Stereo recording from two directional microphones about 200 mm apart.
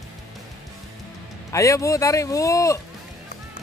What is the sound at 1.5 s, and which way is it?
Speech, 15° left (ahead or behind).